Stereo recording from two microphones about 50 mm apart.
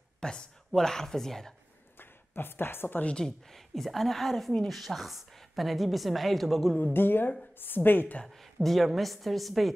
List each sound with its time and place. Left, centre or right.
0.2 s speech: centre
2.0 s a sound: left
3.2 s a woman's voice: centre
6.8 s a woman's voice: left
8.3 s a woman's voice: centre